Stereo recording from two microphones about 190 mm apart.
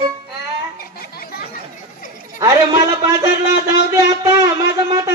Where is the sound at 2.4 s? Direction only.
20° right (ahead or behind).